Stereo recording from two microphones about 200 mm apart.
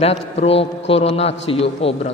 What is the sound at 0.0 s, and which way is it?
A man's voice, 30° left (ahead or behind).